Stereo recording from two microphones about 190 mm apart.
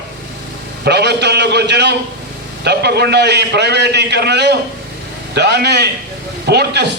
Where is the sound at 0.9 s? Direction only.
60° right (ahead or behind).